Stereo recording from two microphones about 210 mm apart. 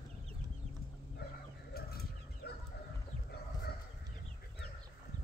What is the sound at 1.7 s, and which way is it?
Bird, 45° left (ahead or behind).